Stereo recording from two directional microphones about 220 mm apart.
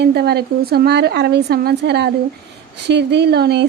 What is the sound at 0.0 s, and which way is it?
Speech, 45° right (ahead or behind).